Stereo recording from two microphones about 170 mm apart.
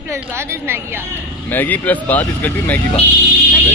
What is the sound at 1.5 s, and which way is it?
Speech, 10° left (ahead or behind).